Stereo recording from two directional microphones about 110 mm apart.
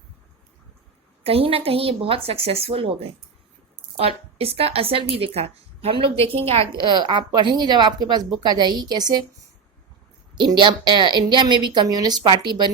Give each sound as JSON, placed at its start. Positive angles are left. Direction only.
{"t": 1.2, "sound": "a woman's voice", "side_deg": -60}
{"t": 6.7, "sound": "speech", "side_deg": -45}
{"t": 10.3, "sound": "a woman's voice", "side_deg": -45}